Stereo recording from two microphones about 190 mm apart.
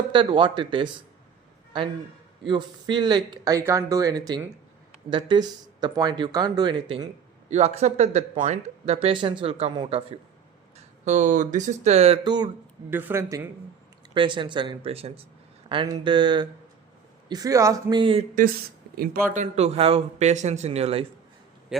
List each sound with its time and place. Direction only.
0.1 s speech: 25° right (ahead or behind)
2.5 s speech: 25° right (ahead or behind)
11.0 s speech: 40° right (ahead or behind); by 12.5 s 20° right (ahead or behind)
12.9 s speech: 10° right (ahead or behind); by 18.3 s 25° right (ahead or behind)
18.9 s speech: 45° right (ahead or behind)
21.7 s speech: 5° right (ahead or behind)